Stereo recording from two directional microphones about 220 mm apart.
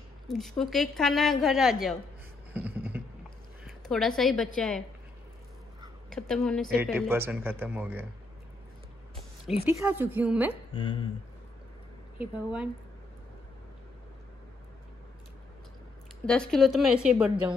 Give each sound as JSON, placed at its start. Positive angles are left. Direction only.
{"t": 0.3, "sound": "a woman's voice", "side_deg": 0}
{"t": 2.5, "sound": "beatboxing", "side_deg": -10}
{"t": 3.6, "sound": "a woman's voice", "side_deg": 0}
{"t": 6.0, "sound": "a woman's voice", "side_deg": 0}
{"t": 7.1, "sound": "speech", "side_deg": -10}
{"t": 9.5, "sound": "speech", "side_deg": -10}
{"t": 10.7, "sound": "speech", "side_deg": 25}
{"t": 12.2, "sound": "a woman's voice", "side_deg": -5}
{"t": 16.3, "sound": "a woman's voice", "side_deg": 5}